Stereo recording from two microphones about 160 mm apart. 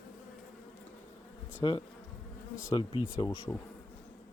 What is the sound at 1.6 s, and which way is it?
Bee, 30° left (ahead or behind).